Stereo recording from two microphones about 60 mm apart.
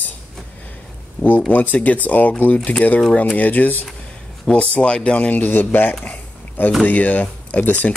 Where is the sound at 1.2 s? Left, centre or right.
Left.